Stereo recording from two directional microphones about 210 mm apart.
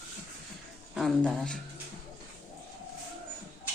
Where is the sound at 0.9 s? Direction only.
5° left (ahead or behind).